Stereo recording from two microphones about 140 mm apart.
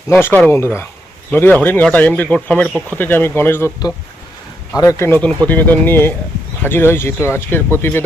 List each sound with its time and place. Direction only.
0.1 s speech: 15° left (ahead or behind)
4.8 s speech: 20° left (ahead or behind)